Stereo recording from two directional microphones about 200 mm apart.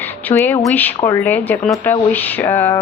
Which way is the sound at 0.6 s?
10° left (ahead or behind).